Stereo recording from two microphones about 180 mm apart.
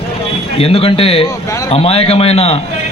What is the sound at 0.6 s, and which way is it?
A man's voice, 30° left (ahead or behind).